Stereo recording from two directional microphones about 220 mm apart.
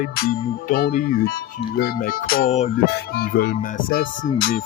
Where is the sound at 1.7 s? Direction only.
40° left (ahead or behind).